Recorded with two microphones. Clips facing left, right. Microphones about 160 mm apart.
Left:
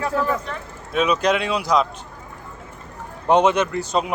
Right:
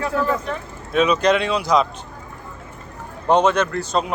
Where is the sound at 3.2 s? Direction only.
15° left (ahead or behind).